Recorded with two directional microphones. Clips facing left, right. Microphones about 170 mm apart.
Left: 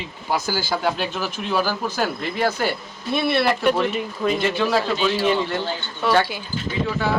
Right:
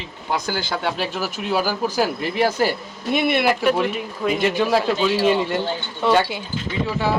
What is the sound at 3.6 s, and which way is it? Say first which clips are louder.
Speech: even; 5° right (ahead or behind).